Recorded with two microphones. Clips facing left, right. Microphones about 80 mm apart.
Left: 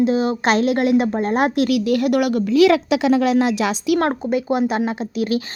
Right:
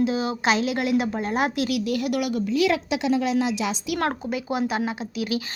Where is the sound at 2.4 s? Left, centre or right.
Left.